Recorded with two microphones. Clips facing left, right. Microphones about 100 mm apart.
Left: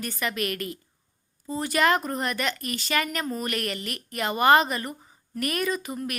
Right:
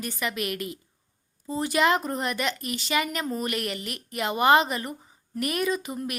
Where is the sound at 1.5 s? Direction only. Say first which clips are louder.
Even; 25° right (ahead or behind).